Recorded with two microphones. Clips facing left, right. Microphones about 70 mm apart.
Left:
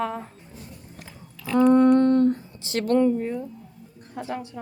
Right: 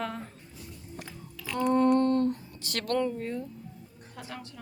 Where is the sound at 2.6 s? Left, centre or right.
Centre.